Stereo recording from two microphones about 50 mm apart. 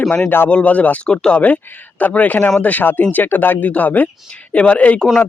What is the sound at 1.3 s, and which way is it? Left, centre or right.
Speech, left.